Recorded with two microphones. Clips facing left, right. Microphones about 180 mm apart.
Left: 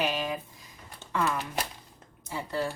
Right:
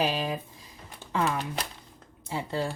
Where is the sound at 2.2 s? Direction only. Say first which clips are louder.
Right 1 dB; 25° right (ahead or behind).